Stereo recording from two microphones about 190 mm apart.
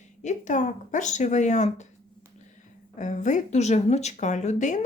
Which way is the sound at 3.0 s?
40° left (ahead or behind).